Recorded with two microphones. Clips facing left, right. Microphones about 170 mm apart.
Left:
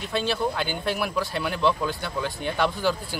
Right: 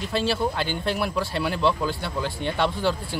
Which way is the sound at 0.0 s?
Centre (ahead or behind).